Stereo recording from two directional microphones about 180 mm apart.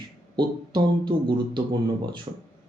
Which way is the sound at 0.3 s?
25° right (ahead or behind).